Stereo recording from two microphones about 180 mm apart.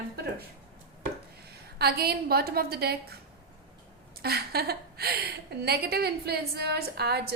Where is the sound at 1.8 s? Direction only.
60° right (ahead or behind).